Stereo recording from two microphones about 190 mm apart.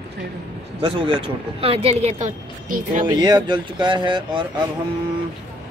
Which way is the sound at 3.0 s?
20° right (ahead or behind).